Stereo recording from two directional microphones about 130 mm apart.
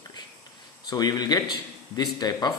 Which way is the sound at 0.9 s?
30° left (ahead or behind).